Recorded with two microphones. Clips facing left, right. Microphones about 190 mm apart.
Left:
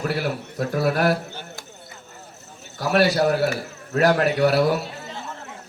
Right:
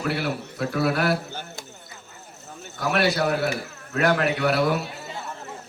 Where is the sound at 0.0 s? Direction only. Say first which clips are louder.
Left 1 dB; 40° left (ahead or behind).